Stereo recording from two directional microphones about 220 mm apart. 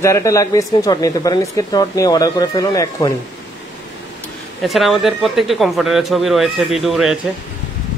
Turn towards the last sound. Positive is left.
turn(degrees=0)  # may be behind; listen again after turning